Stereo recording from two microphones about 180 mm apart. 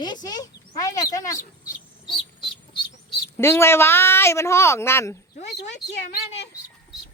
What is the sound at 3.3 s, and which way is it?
Speech, 15° left (ahead or behind).